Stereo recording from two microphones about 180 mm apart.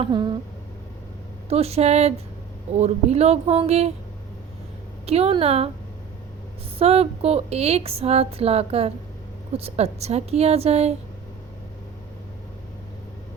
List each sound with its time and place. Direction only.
0.0 s speech: 25° right (ahead or behind)
1.5 s speech: 35° right (ahead or behind)
5.0 s speech: 35° right (ahead or behind)
6.7 s speech: 35° right (ahead or behind)